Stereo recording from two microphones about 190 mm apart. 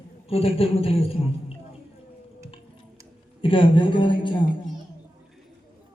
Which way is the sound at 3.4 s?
25° left (ahead or behind).